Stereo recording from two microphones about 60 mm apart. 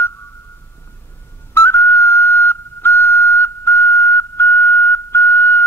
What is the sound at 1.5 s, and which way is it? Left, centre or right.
Whistle, left.